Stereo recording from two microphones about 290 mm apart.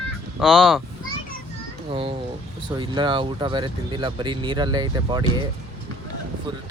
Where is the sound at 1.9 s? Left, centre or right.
Centre.